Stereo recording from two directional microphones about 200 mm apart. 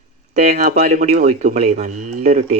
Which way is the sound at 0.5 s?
35° right (ahead or behind).